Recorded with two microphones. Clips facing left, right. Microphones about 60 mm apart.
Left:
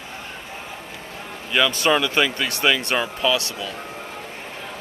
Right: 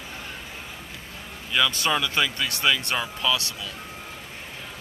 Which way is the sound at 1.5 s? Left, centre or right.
Left.